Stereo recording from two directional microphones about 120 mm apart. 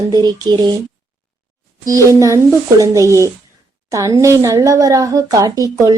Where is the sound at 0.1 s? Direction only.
35° right (ahead or behind).